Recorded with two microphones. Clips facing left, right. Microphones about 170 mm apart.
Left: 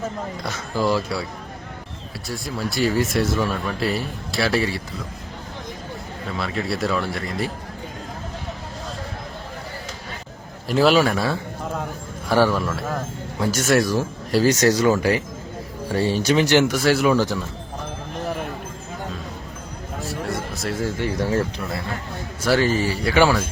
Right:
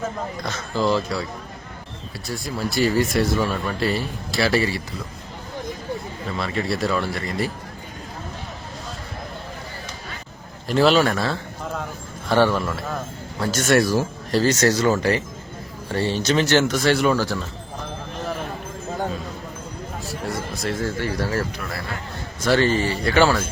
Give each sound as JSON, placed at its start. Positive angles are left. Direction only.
{"t": 0.4, "sound": "speech", "side_deg": 10}
{"t": 2.2, "sound": "speech", "side_deg": 0}
{"t": 6.3, "sound": "speech", "side_deg": 0}
{"t": 10.7, "sound": "speech", "side_deg": 5}
{"t": 14.3, "sound": "speech", "side_deg": 15}
{"t": 17.2, "sound": "speech", "side_deg": 15}
{"t": 20.2, "sound": "a sound", "side_deg": 0}
{"t": 20.8, "sound": "speech", "side_deg": 20}
{"t": 22.4, "sound": "speech", "side_deg": 5}